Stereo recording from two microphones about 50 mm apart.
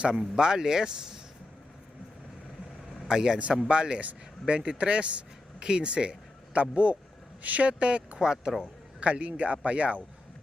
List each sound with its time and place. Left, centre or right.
0.1 s speech: centre
3.1 s speech: centre